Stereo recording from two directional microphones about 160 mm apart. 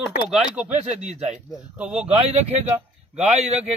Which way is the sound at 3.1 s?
45° right (ahead or behind).